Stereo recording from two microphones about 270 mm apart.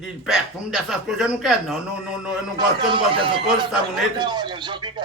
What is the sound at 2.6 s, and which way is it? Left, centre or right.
Speech, centre.